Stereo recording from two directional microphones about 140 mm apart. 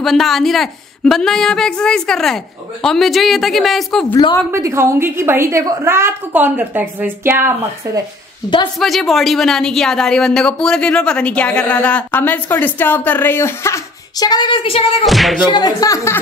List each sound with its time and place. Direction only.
0.0 s a woman's voice: centre (ahead or behind)
4.1 s speech: 35° left (ahead or behind)
4.5 s a woman's voice: 20° right (ahead or behind)
8.7 s a woman's voice: centre (ahead or behind); by 15.0 s 40° left (ahead or behind)
15.0 s a woman's voice: centre (ahead or behind)
15.5 s speech: 30° left (ahead or behind)